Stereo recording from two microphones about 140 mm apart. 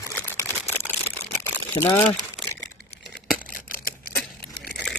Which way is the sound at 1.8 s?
30° left (ahead or behind).